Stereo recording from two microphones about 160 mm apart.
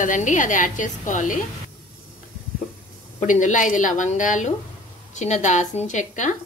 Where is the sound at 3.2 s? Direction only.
50° left (ahead or behind).